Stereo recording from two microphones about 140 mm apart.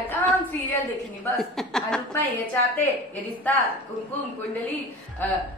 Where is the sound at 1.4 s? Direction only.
Centre (ahead or behind).